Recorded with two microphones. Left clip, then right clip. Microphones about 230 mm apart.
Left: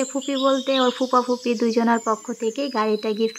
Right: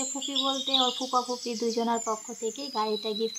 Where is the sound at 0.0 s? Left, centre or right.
Left.